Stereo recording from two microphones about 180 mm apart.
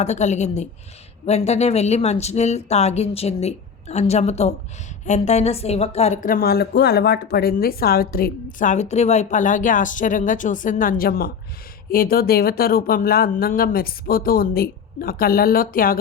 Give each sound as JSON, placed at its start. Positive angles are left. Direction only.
{"t": 0.0, "sound": "a woman's voice", "side_deg": 40}